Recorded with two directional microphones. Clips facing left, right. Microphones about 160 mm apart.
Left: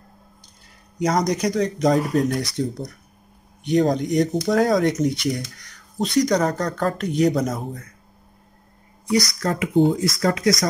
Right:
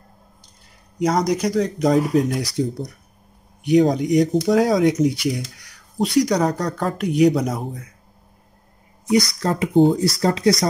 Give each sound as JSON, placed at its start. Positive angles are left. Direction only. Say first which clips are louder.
{"t": 0.9, "sound": "speech", "louder": "right 2 dB", "side_deg": 0}
{"t": 3.6, "sound": "speech", "louder": "right 3 dB", "side_deg": -10}
{"t": 9.1, "sound": "speech", "louder": "right 3 dB", "side_deg": -30}